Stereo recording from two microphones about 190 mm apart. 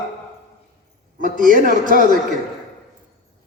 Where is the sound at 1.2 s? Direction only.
45° right (ahead or behind).